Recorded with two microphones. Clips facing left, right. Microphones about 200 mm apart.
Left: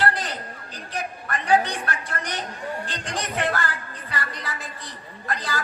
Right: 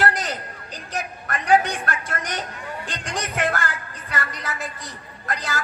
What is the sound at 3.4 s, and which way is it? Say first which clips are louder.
Music: right 3 dB; 45° right (ahead or behind).